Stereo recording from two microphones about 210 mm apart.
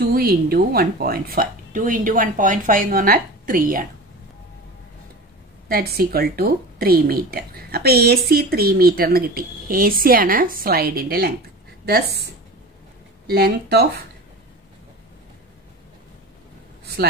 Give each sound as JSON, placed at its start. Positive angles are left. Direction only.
{"t": 0.0, "sound": "speech", "side_deg": -45}
{"t": 5.7, "sound": "a woman's voice", "side_deg": -45}
{"t": 13.3, "sound": "a woman's voice", "side_deg": -50}